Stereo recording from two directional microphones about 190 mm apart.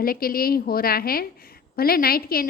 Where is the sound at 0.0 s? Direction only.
50° left (ahead or behind).